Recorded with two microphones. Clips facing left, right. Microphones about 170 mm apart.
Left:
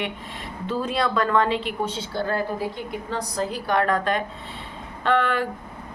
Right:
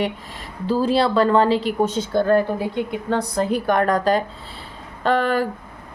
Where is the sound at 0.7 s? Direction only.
30° right (ahead or behind).